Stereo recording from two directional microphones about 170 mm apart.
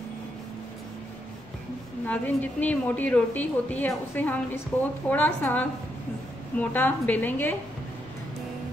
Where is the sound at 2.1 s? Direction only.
10° left (ahead or behind).